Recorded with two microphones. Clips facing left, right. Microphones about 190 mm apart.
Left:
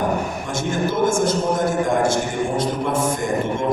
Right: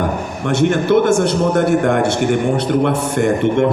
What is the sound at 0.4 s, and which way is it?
A man's voice, 70° right (ahead or behind).